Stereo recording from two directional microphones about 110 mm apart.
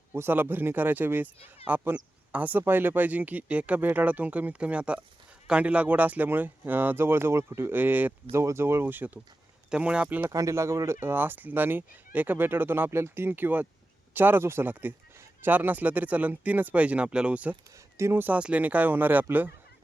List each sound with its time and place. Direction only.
0.1 s speech: 20° right (ahead or behind)
10.2 s speech: 25° right (ahead or behind)
17.9 s speech: 25° right (ahead or behind)